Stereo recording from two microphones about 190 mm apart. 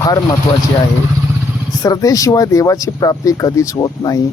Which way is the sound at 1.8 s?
20° left (ahead or behind).